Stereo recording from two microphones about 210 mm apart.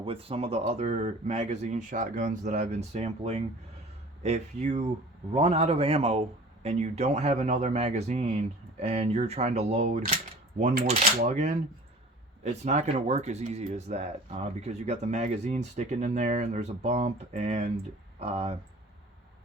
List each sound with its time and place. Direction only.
0.0 s speech: 25° right (ahead or behind)
12.4 s speech: 35° right (ahead or behind)